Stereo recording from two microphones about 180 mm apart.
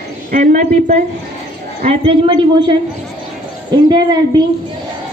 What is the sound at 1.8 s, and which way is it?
Speech, 30° right (ahead or behind).